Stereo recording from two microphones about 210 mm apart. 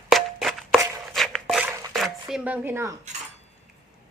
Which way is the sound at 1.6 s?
10° right (ahead or behind).